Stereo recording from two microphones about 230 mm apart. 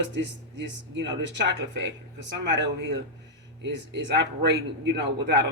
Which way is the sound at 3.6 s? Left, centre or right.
Right.